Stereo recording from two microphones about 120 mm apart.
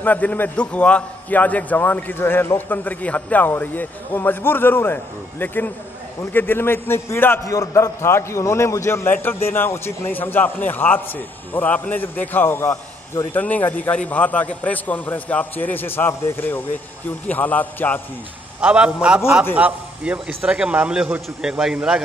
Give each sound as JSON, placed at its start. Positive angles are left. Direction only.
{"t": 0.0, "sound": "a man's voice", "side_deg": 15}
{"t": 18.6, "sound": "speech", "side_deg": -10}